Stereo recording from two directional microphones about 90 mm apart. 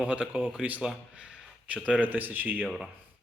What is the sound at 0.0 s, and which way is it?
Speech, 15° right (ahead or behind).